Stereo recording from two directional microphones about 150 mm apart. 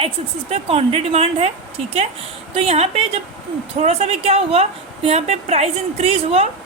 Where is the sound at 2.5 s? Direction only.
45° right (ahead or behind).